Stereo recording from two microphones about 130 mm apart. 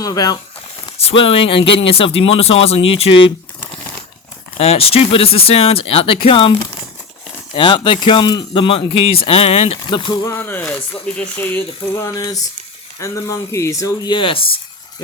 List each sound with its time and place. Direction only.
0.0 s speech: 30° left (ahead or behind)
0.9 s speech: 45° left (ahead or behind)
4.5 s speech: 50° left (ahead or behind)
7.5 s speech: 40° left (ahead or behind)
9.9 s speech: 35° left (ahead or behind)
10.3 s speech: 15° left (ahead or behind); by 14.6 s 45° left (ahead or behind)